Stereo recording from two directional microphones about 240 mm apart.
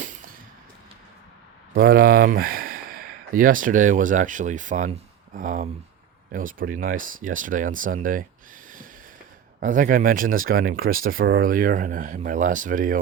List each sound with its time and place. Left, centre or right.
1.7 s speech: right
9.6 s speech: right